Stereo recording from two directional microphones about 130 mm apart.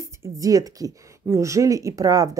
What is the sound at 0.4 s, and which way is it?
Speech, 25° right (ahead or behind).